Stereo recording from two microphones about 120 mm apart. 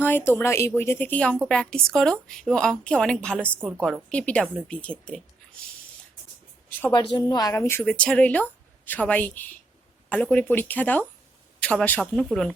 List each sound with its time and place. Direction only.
0.0 s a woman's voice: 15° left (ahead or behind)
6.7 s speech: 15° left (ahead or behind)
6.9 s a woman's voice: 35° left (ahead or behind)
7.5 s a woman's voice: 20° left (ahead or behind)